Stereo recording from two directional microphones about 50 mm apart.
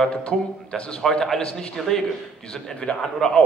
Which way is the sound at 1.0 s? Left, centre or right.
Centre.